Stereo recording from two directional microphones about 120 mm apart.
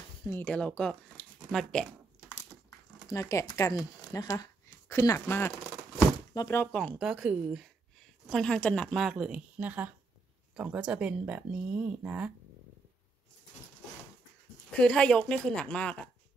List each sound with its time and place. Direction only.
0.4 s speech: 15° left (ahead or behind)
3.1 s speech: 25° left (ahead or behind)
6.7 s a woman's voice: 5° left (ahead or behind)
7.1 s a woman's voice: 5° right (ahead or behind)
8.3 s a woman's voice: 5° left (ahead or behind); by 12.3 s 15° right (ahead or behind)
14.7 s speech: 5° left (ahead or behind)